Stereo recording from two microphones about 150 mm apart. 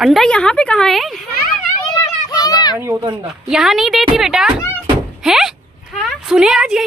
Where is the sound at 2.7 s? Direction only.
15° right (ahead or behind).